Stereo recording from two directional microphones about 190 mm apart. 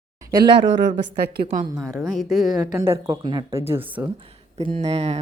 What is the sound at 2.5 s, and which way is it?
Speech, 20° right (ahead or behind).